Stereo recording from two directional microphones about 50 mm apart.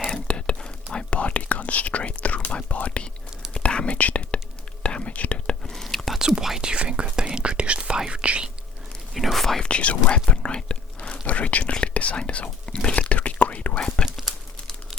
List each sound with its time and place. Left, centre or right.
0.3 s whispering: centre
5.7 s whispering: centre
6.1 s whispering: centre
9.1 s whispering: centre
9.6 s whispering: left
14.0 s crumpling: centre